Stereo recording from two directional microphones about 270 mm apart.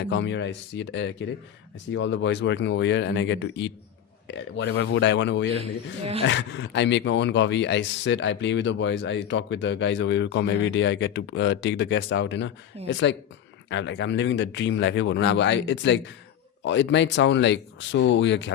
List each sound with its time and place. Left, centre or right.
0.0 s speech: left